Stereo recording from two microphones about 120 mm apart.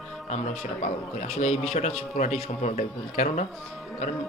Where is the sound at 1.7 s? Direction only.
75° left (ahead or behind).